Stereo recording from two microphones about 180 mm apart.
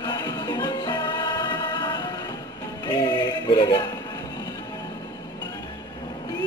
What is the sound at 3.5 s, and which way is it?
Music, 25° left (ahead or behind).